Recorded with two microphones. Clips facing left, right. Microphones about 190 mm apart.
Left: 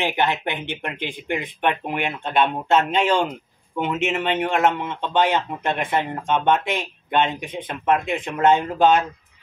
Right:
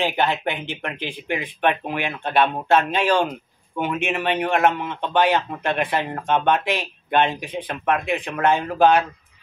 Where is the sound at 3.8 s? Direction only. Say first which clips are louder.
Left 1 dB; 20° left (ahead or behind).